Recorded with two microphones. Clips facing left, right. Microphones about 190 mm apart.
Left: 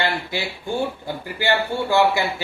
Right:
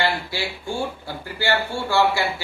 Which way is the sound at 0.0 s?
20° left (ahead or behind).